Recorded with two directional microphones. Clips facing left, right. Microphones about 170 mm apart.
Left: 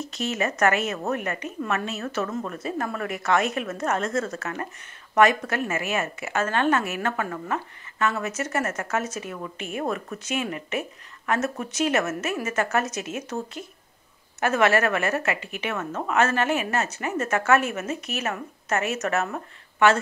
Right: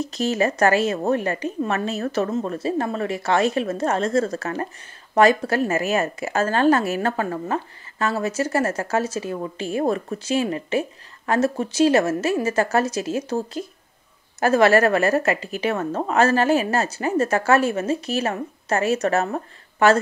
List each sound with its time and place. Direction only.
0.0 s a woman's voice: 35° right (ahead or behind)